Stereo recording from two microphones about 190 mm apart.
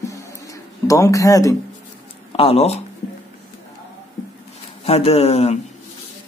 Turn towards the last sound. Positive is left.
turn(degrees=35)  # may be behind; listen again after turning